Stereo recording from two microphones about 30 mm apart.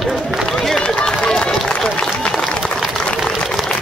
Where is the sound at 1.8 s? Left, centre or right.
Left.